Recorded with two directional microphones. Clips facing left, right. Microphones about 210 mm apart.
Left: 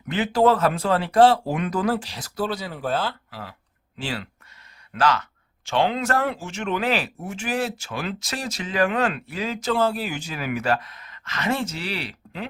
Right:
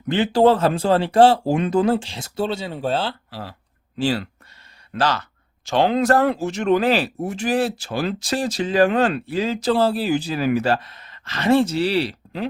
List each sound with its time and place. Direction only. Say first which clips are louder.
0.1 s speech: right 4 dB; 30° right (ahead or behind)